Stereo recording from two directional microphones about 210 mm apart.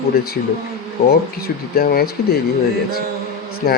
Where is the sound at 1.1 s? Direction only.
45° left (ahead or behind).